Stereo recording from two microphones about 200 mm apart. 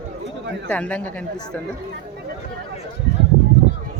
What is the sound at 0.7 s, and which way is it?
Speech, 5° left (ahead or behind).